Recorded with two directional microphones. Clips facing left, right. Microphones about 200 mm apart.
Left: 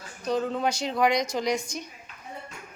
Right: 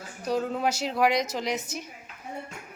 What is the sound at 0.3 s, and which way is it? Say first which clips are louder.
A woman's voice: left 1 dB; 5° right (ahead or behind).